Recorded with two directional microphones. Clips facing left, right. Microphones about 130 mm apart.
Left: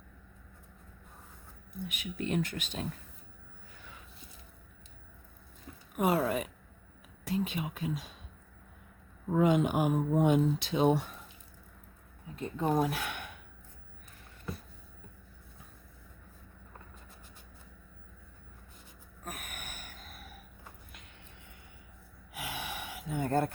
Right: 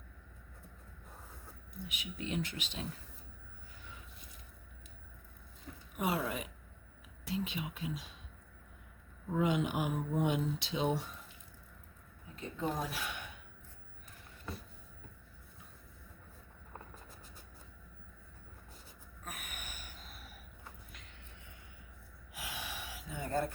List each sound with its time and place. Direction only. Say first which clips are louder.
1.9 s speech: left 6 dB; 55° left (ahead or behind)
6.0 s speech: left 7 dB; 50° left (ahead or behind)
9.3 s speech: left 6 dB; 50° left (ahead or behind)
12.4 s speech: left 8 dB; 55° left (ahead or behind)
19.2 s gasp: left 4 dB; 45° left (ahead or behind)
22.3 s gasp: left 5 dB; 60° left (ahead or behind)